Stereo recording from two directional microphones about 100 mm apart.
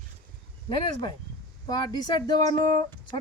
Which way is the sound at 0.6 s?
55° left (ahead or behind).